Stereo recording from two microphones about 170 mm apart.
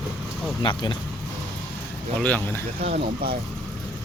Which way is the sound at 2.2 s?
10° left (ahead or behind).